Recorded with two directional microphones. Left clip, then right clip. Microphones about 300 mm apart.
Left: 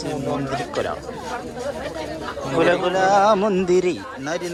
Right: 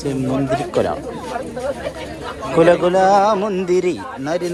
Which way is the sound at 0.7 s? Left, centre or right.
Centre.